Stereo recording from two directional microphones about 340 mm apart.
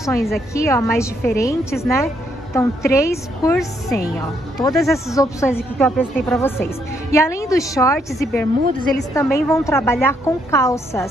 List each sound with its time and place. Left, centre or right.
0.0 s speech: centre